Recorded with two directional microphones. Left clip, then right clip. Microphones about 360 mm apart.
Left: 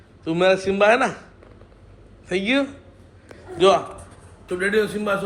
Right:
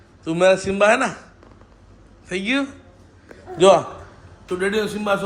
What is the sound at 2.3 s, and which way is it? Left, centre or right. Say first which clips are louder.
Speech: left 1 dB; centre.